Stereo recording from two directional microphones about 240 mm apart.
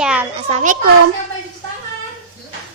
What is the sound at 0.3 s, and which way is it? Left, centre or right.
Speech, right.